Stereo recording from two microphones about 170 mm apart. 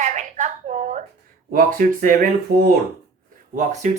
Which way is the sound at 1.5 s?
55° right (ahead or behind).